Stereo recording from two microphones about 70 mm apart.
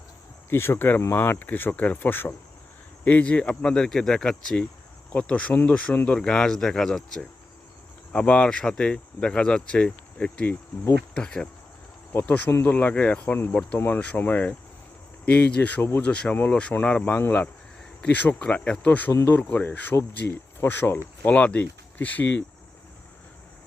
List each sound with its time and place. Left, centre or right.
0.5 s speech: left
3.0 s speech: centre
8.1 s speech: centre
12.1 s speech: left
12.5 s speech: left
12.7 s speech: left
13.7 s speech: left
21.2 s speech: left